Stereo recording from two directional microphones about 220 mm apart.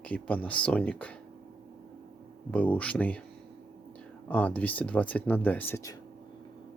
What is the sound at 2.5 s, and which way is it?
Speech, 5° left (ahead or behind).